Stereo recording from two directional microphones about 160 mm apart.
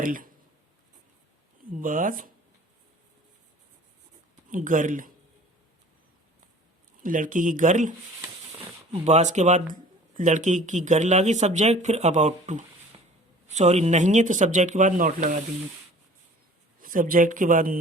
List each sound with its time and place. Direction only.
0.0 s speech: 60° right (ahead or behind)
1.8 s speech: 55° right (ahead or behind)
4.5 s speech: 55° right (ahead or behind)
7.0 s speech: 55° right (ahead or behind)
12.9 s a sound: 35° right (ahead or behind)
13.5 s speech: 45° right (ahead or behind)
16.8 s speech: 60° right (ahead or behind)